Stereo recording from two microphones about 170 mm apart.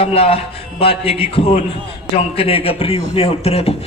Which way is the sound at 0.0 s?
35° left (ahead or behind).